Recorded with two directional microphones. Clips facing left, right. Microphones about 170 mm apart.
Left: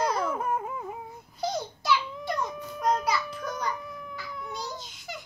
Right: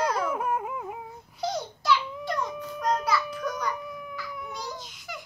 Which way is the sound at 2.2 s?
10° left (ahead or behind).